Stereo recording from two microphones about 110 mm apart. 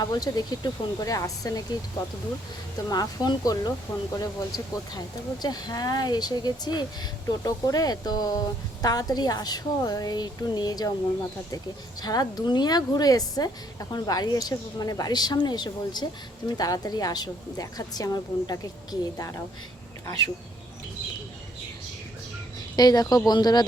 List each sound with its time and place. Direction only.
0.0 s speech: 35° left (ahead or behind)
2.9 s speech: 35° left (ahead or behind)
22.7 s speech: 35° left (ahead or behind)